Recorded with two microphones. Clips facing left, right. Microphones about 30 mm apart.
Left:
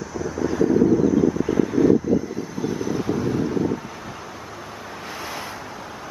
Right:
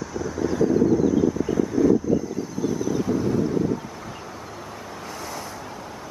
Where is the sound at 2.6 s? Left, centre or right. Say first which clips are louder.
Even; left.